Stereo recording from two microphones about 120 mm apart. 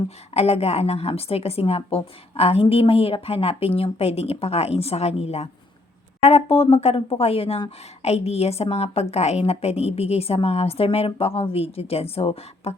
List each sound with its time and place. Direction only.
0.3 s a woman's voice: 60° left (ahead or behind)